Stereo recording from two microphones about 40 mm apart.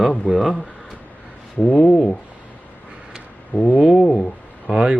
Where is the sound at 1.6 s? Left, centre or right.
Left.